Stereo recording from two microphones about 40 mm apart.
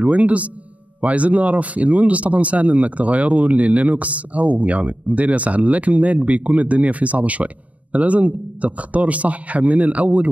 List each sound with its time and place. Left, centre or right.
0.0 s speech: right